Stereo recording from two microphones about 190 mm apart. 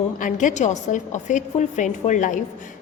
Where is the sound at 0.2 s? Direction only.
45° left (ahead or behind).